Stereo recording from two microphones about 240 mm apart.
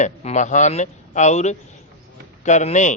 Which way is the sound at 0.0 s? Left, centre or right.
Left.